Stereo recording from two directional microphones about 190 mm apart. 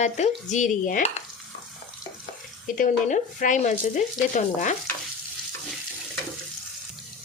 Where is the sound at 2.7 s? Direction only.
45° left (ahead or behind).